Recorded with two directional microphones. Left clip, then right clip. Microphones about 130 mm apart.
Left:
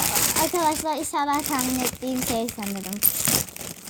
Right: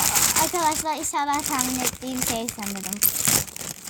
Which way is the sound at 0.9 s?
15° right (ahead or behind).